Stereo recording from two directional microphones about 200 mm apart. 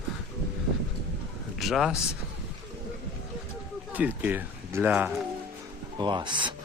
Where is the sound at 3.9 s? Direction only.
10° right (ahead or behind).